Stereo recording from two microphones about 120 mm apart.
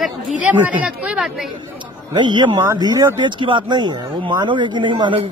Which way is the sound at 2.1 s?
40° right (ahead or behind).